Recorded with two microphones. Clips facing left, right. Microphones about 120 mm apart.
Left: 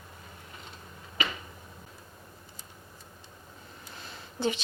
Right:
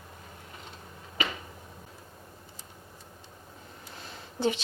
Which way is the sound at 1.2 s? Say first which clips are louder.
Right 1 dB; 45° right (ahead or behind).